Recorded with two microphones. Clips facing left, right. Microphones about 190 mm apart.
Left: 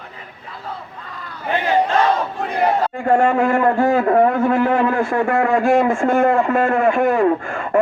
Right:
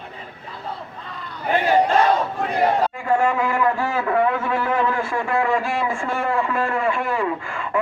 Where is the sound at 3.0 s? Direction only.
55° left (ahead or behind).